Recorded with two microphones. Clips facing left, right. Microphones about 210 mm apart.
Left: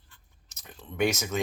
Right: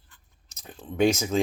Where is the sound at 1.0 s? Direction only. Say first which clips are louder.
Right 5 dB; 30° right (ahead or behind).